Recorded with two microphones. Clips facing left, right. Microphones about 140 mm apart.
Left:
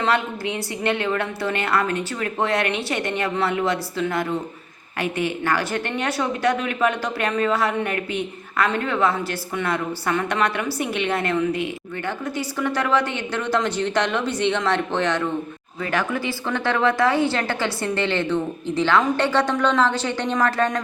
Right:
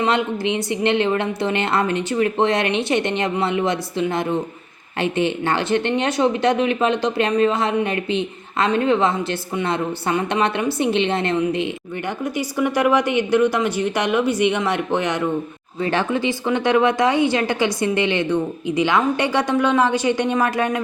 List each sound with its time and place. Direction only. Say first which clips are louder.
0.0 s a woman's voice: right 3 dB; 20° right (ahead or behind)
15.8 s a woman's voice: right 4 dB; 25° right (ahead or behind); by 20.8 s 10° right (ahead or behind)